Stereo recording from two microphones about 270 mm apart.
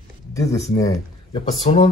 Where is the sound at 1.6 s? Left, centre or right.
Left.